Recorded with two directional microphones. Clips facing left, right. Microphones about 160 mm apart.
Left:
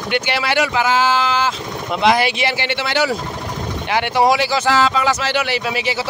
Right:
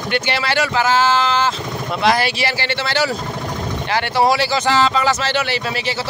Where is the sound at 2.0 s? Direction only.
20° left (ahead or behind).